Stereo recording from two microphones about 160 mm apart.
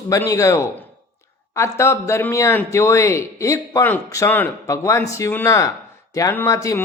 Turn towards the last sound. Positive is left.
turn(degrees=20)  # may be behind; listen again after turning